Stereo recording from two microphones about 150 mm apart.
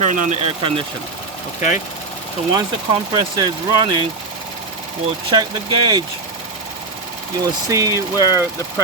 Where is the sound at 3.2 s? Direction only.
30° right (ahead or behind).